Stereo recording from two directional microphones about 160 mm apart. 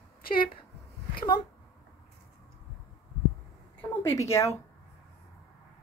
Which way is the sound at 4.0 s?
20° left (ahead or behind).